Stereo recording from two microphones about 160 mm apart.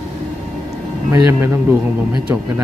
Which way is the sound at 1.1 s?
15° right (ahead or behind).